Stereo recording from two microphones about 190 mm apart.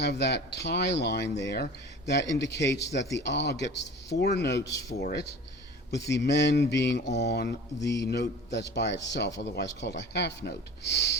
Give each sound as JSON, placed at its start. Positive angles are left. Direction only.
{"t": 0.0, "sound": "a man's voice", "side_deg": 60}
{"t": 4.6, "sound": "speech", "side_deg": 15}
{"t": 5.9, "sound": "a man's voice", "side_deg": 60}